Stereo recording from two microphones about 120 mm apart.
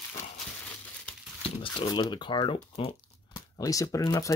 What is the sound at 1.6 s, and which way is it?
Speech, 45° left (ahead or behind).